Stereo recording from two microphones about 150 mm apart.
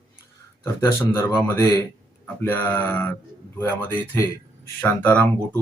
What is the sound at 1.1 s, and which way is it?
Speech, 15° left (ahead or behind).